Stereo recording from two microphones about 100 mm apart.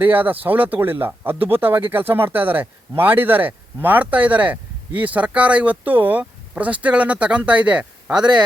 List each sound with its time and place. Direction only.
0.0 s speech: 20° right (ahead or behind)